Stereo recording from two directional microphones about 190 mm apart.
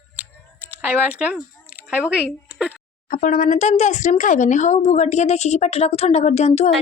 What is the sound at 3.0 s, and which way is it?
Speech, 45° left (ahead or behind).